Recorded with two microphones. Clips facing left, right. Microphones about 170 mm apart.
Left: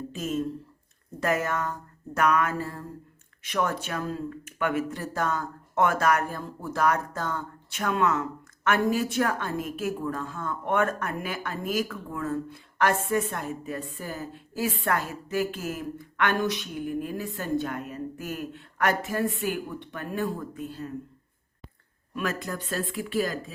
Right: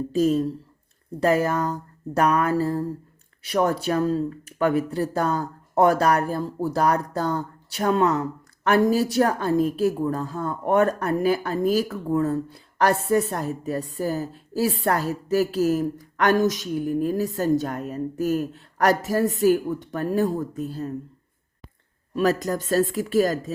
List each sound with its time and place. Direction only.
0.1 s speech: 35° right (ahead or behind)
22.1 s speech: 35° right (ahead or behind)